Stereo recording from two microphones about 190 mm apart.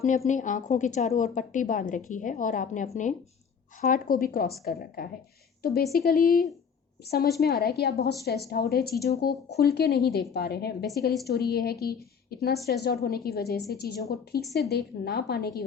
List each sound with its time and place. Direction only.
0.3 s a woman's voice: 40° left (ahead or behind); by 15.6 s 55° left (ahead or behind)